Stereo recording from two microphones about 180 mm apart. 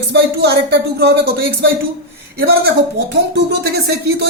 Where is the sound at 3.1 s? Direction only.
70° right (ahead or behind).